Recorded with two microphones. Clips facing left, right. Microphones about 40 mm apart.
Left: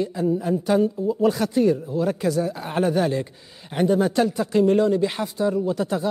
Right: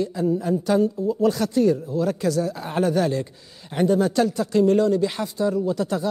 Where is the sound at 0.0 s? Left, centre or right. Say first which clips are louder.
Even; centre.